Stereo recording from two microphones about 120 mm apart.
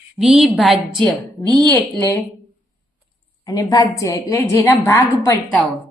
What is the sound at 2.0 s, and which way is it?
Speech, 20° left (ahead or behind).